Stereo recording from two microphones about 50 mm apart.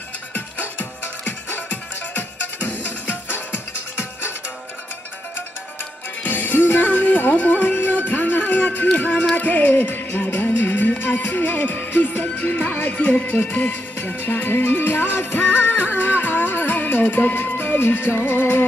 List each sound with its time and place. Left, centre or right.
0.3 s music: left
6.2 s music: left